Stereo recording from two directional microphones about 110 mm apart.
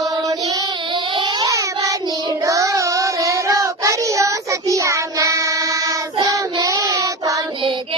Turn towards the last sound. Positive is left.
turn(degrees=-30)  # may be behind; listen again after turning